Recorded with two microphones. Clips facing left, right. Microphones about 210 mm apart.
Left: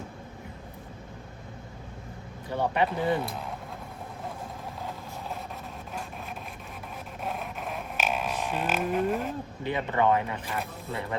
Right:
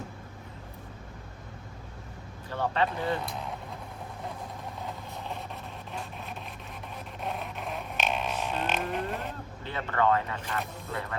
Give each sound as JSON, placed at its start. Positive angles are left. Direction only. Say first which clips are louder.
{"t": 2.5, "sound": "speech", "louder": "left 2 dB", "side_deg": 15}
{"t": 7.2, "sound": "a sound", "louder": "left 1 dB", "side_deg": 0}
{"t": 9.6, "sound": "speech", "louder": "left 2 dB", "side_deg": 15}